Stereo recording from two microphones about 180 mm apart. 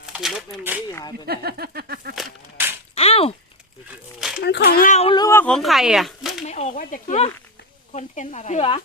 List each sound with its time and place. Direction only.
0.0 s speech: 5° right (ahead or behind)
0.9 s speech: 15° left (ahead or behind)
1.3 s a sound: 60° right (ahead or behind)
2.6 s whip: 10° right (ahead or behind)
2.9 s a sound: 35° left (ahead or behind)
4.4 s speech: 70° left (ahead or behind)
4.8 s speech: 45° left (ahead or behind)
5.0 s speech: 20° left (ahead or behind); by 6.3 s centre (ahead or behind)
6.4 s speech: 40° left (ahead or behind)